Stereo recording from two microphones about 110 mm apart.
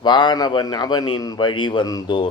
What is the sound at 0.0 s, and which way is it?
A man's voice, 45° left (ahead or behind).